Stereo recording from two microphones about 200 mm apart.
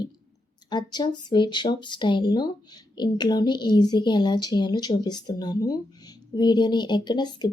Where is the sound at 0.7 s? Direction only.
20° left (ahead or behind).